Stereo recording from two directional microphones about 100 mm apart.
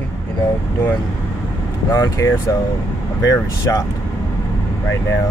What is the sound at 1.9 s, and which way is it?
Speech, 35° left (ahead or behind).